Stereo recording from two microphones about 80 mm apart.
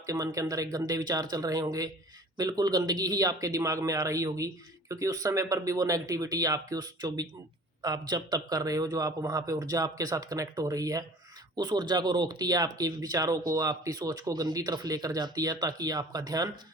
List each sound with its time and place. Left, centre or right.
0.0 s speech: right